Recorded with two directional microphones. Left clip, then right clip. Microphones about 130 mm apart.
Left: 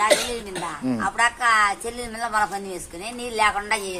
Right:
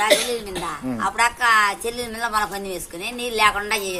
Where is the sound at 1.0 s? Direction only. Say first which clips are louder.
Right 2 dB; 15° right (ahead or behind).